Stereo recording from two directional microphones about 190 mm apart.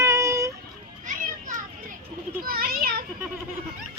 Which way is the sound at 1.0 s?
45° right (ahead or behind).